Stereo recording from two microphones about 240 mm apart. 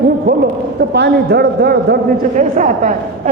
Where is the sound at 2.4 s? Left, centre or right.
Right.